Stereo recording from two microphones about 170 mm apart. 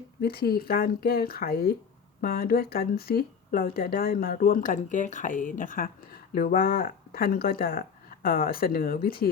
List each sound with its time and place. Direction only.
0.2 s speech: 65° left (ahead or behind)